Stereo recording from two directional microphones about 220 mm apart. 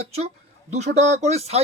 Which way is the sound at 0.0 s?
30° right (ahead or behind).